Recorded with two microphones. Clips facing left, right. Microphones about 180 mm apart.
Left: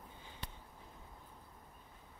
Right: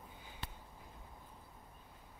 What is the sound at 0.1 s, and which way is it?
Sniff, 10° right (ahead or behind).